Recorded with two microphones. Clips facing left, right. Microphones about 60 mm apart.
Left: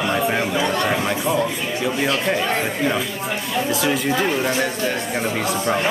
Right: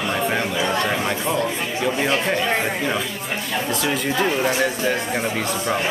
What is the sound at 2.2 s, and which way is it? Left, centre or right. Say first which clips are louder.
Speech: even; centre.